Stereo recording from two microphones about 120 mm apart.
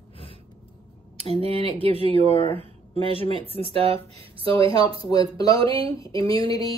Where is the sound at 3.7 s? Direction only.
55° right (ahead or behind).